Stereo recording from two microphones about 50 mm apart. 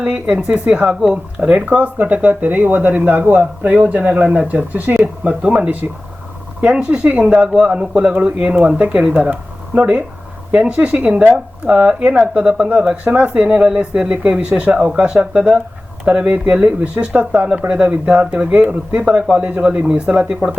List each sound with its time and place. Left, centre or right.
0.1 s speech: centre
17.7 s speech: centre
19.0 s a man's voice: centre
19.4 s speech: right